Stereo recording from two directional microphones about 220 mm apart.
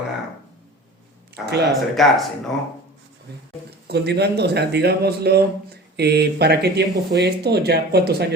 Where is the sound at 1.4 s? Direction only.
50° right (ahead or behind).